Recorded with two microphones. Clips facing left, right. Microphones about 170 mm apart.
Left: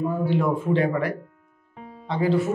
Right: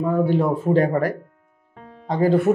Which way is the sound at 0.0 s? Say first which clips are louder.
Right 5 dB; 70° right (ahead or behind).